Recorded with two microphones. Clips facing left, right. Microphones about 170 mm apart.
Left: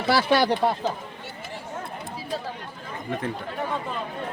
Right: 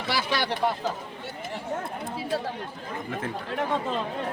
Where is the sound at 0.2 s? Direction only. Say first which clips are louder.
Left 7 dB; 55° left (ahead or behind).